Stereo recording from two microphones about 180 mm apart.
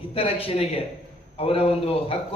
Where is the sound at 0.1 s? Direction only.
35° left (ahead or behind).